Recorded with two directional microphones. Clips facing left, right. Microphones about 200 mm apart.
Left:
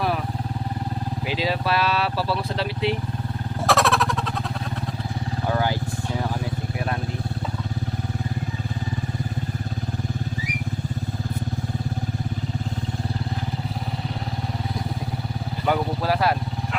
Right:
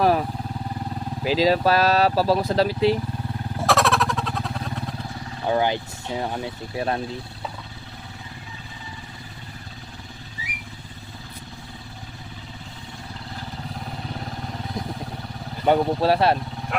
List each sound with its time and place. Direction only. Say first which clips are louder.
1.2 s speech: right 7 dB; 35° right (ahead or behind)
3.6 s vehicle: even; centre (ahead or behind)
5.5 s speech: right 3 dB; 20° right (ahead or behind)
6.4 s vehicle: right 1 dB; 30° right (ahead or behind)
15.6 s speech: right 5 dB; 25° right (ahead or behind)